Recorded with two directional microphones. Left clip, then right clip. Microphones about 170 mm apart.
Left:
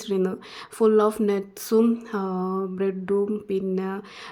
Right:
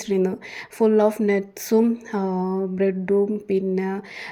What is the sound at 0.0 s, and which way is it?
Speech, 10° right (ahead or behind).